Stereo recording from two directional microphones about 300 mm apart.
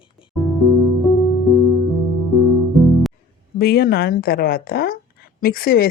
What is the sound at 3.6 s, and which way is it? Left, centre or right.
A woman's voice, left.